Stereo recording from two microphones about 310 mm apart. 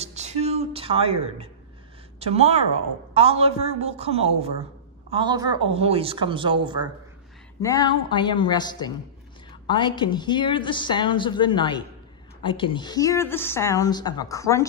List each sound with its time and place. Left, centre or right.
0.0 s a sound: right
2.1 s a woman's voice: centre
7.6 s a woman's voice: centre